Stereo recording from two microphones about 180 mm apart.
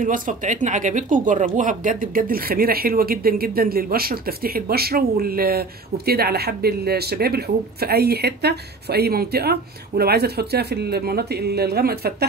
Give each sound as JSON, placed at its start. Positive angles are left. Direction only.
{"t": 0.0, "sound": "speech", "side_deg": -45}